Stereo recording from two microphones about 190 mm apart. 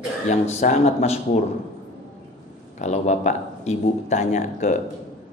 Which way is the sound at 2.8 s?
40° left (ahead or behind).